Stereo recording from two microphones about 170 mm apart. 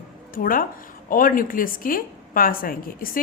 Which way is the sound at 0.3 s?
55° left (ahead or behind).